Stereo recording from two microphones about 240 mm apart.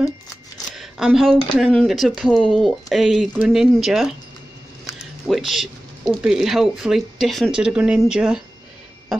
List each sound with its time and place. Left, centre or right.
0.7 s speech: centre
5.3 s speech: centre